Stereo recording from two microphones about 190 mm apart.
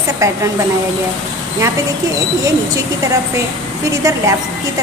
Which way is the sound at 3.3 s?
15° right (ahead or behind).